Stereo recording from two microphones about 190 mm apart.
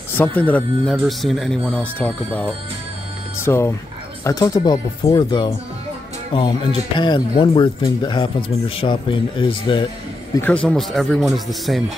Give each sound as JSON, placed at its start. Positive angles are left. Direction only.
{"t": 0.1, "sound": "speech", "side_deg": 10}
{"t": 10.3, "sound": "a man's voice", "side_deg": 10}